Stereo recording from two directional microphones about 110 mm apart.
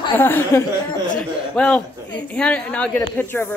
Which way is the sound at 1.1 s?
10° left (ahead or behind).